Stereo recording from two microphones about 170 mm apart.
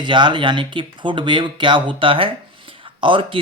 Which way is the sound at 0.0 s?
25° right (ahead or behind).